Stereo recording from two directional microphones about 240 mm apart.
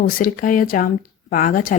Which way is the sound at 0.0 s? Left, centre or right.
Left.